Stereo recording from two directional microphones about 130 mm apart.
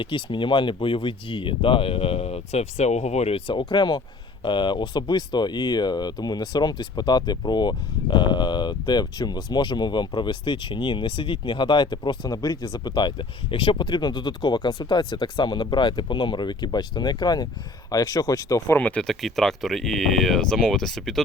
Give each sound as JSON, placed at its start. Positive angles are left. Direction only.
{"t": 0.0, "sound": "speech", "side_deg": 40}
{"t": 18.8, "sound": "speech", "side_deg": 10}